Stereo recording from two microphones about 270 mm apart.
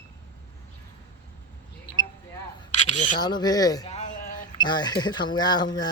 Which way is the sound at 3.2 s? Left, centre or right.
Centre.